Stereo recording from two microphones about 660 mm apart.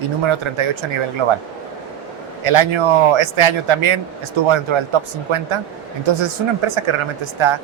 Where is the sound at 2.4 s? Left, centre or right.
Right.